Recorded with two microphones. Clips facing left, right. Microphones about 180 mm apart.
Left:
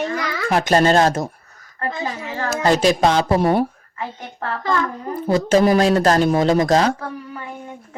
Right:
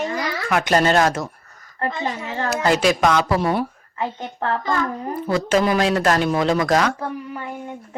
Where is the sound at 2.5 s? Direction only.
40° left (ahead or behind).